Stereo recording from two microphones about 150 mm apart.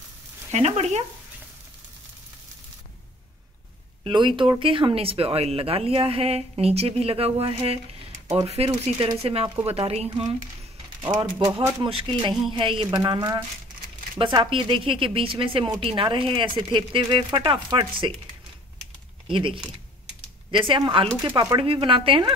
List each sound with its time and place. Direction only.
0.5 s speech: 45° right (ahead or behind)
4.0 s speech: 35° right (ahead or behind)
11.1 s speech: 35° right (ahead or behind)
19.2 s speech: 35° right (ahead or behind)
21.1 s speech: 20° right (ahead or behind)
21.5 s speech: 35° right (ahead or behind)